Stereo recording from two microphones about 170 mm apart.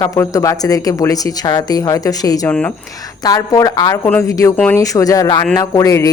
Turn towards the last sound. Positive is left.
turn(degrees=20)  # may be behind; listen again after turning